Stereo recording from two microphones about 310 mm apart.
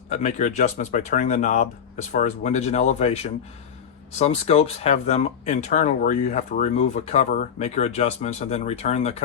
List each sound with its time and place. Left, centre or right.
0.1 s speech: left